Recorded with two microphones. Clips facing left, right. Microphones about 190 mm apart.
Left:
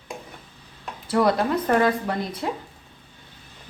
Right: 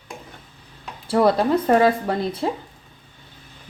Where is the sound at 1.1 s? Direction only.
30° right (ahead or behind).